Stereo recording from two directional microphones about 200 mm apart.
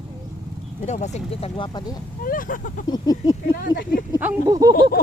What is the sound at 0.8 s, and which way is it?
Speech, 35° left (ahead or behind).